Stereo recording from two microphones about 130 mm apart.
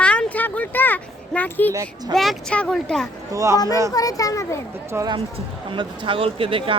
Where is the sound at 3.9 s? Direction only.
25° left (ahead or behind).